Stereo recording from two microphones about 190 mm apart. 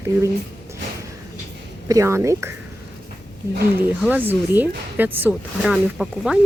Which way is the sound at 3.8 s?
10° right (ahead or behind).